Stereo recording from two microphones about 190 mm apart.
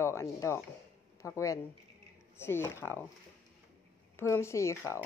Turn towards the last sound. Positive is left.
turn(degrees=15)  # may be behind; listen again after turning